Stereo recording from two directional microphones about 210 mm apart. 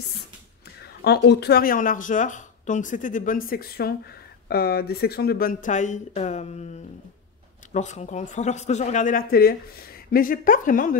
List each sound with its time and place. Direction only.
1.0 s speech: 50° left (ahead or behind); by 6.7 s 30° left (ahead or behind)
7.7 s speech: 35° left (ahead or behind)